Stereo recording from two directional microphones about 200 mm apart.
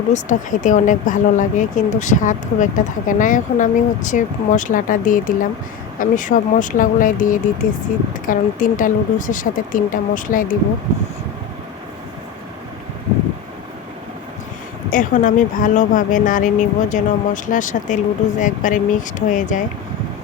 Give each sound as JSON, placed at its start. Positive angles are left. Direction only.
{"t": 0.1, "sound": "speech", "side_deg": 40}
{"t": 14.8, "sound": "speech", "side_deg": 40}